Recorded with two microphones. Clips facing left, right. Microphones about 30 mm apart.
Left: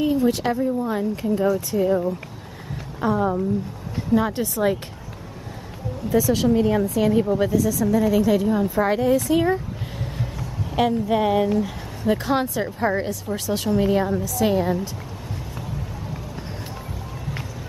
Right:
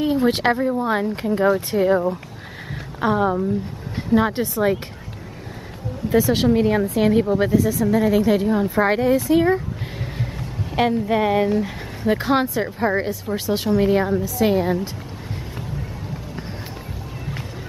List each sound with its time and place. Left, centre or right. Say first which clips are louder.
0.0 s a woman's voice: right 2 dB; right
0.6 s speech: right 2 dB; right
2.7 s a sound: right 2 dB; right
4.1 s a woman's voice: right 2 dB; right
6.0 s a woman's voice: right 2 dB; right
9.2 s speech: right 3 dB; centre
9.5 s a sound: right 3 dB; right
10.7 s a woman's voice: right 1 dB; right